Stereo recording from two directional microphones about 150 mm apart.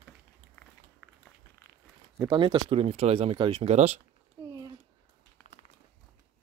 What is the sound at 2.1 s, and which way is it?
Speech, 30° right (ahead or behind).